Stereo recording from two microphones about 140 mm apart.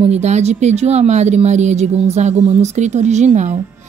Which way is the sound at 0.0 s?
55° right (ahead or behind).